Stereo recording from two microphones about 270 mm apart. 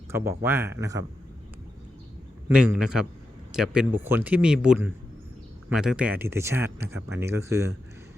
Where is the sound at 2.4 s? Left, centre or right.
Centre.